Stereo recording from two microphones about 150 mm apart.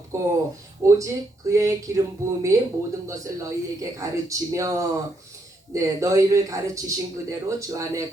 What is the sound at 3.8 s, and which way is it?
Speech, 20° right (ahead or behind).